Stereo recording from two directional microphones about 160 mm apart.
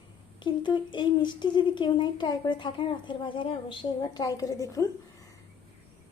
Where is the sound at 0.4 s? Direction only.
30° left (ahead or behind).